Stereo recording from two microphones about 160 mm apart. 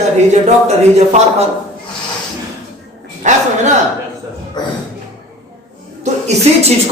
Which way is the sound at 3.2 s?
50° right (ahead or behind).